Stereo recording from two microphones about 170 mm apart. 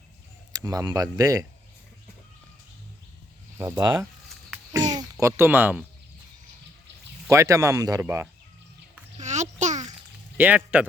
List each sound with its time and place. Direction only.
0.5 s speech: 20° right (ahead or behind)
3.6 s speech: 15° right (ahead or behind)
4.7 s a sound: 20° right (ahead or behind)
5.2 s speech: 15° right (ahead or behind)
7.3 s speech: 20° right (ahead or behind)
9.1 s a sound: 45° right (ahead or behind)
10.3 s speech: 10° right (ahead or behind)